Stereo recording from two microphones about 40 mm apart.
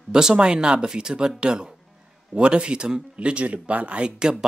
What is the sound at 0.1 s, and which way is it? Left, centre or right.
Speech, centre.